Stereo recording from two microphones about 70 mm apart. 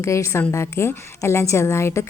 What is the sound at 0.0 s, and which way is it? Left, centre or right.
A woman's voice, left.